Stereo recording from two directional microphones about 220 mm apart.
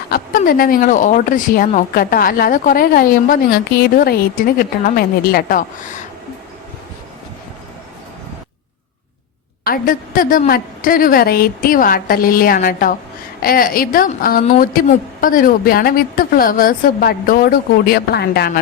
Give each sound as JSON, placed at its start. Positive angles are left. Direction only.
{"t": 0.1, "sound": "speech", "side_deg": 40}
{"t": 9.6, "sound": "speech", "side_deg": 40}